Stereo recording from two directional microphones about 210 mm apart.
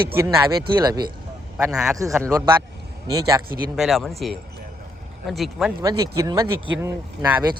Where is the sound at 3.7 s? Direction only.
Centre (ahead or behind).